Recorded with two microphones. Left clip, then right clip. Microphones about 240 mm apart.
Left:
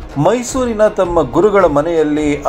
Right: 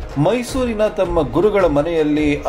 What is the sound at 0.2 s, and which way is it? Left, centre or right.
A man's voice, centre.